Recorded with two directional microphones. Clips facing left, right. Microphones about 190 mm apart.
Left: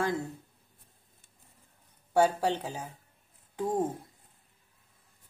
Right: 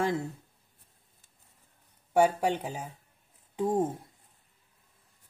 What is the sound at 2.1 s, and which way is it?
Speech, 15° right (ahead or behind).